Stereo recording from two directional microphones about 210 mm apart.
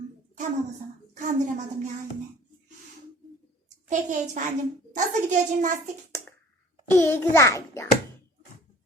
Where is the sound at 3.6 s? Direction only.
35° right (ahead or behind).